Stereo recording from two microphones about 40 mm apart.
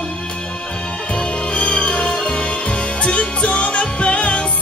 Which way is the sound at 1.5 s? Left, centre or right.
Left.